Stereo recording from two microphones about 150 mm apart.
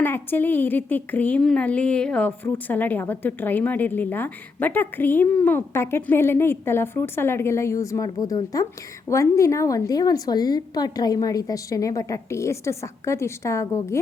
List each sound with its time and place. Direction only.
0.0 s a woman's voice: 15° left (ahead or behind)